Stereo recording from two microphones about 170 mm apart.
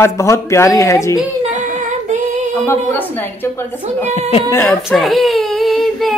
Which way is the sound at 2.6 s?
10° left (ahead or behind).